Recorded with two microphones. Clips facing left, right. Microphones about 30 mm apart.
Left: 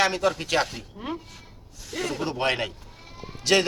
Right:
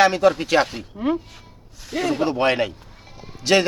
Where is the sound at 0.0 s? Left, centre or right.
Centre.